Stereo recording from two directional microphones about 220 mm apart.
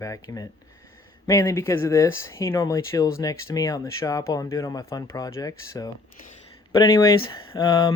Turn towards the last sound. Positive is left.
turn(degrees=20)  # may be behind; listen again after turning